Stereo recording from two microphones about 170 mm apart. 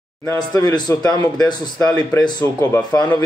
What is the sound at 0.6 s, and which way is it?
Speech, 25° left (ahead or behind).